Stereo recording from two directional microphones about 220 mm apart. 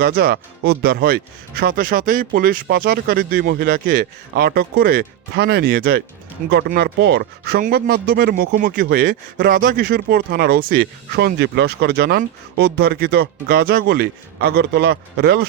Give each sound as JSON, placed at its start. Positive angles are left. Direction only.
{"t": 0.0, "sound": "speech", "side_deg": -45}